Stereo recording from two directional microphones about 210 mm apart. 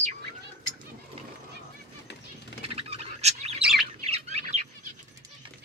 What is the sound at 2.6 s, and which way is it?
Bird, 30° right (ahead or behind).